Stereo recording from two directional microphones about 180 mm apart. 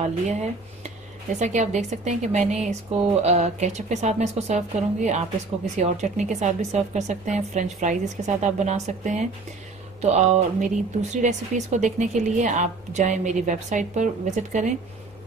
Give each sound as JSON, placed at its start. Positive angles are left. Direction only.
{"t": 0.3, "sound": "speech", "side_deg": -40}